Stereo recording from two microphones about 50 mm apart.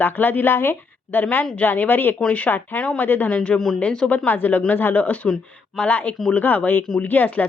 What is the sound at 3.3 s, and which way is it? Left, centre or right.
Speech, left.